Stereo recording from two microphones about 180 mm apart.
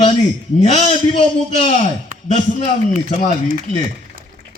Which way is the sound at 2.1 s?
45° right (ahead or behind).